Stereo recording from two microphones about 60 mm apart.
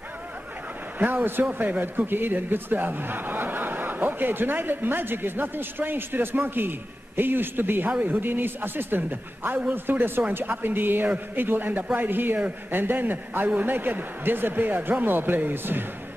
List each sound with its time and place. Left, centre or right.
0.9 s a man's voice: right